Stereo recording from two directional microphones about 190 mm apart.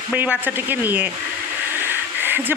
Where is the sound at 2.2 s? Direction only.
10° right (ahead or behind).